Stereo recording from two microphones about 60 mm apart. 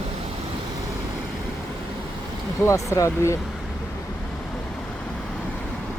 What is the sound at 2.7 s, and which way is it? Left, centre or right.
Speech, left.